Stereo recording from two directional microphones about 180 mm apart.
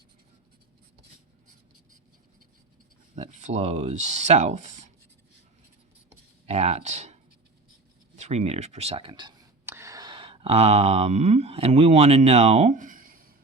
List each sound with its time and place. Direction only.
3.2 s speech: 40° right (ahead or behind)
6.4 s speech: 35° right (ahead or behind)
9.6 s a sound: 15° right (ahead or behind); by 13.3 s 50° right (ahead or behind)